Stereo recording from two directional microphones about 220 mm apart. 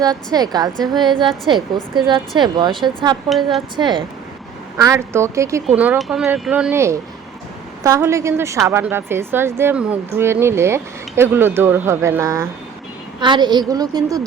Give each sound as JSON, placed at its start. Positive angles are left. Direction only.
{"t": 0.0, "sound": "a woman's voice", "side_deg": -15}
{"t": 3.2, "sound": "a woman's voice", "side_deg": 0}
{"t": 3.8, "sound": "a woman's voice", "side_deg": -20}